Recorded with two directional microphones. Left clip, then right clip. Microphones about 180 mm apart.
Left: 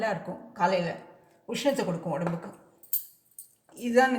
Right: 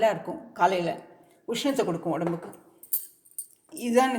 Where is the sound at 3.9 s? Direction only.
45° right (ahead or behind).